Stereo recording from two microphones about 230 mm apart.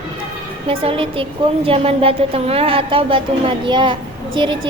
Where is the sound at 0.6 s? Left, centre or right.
Right.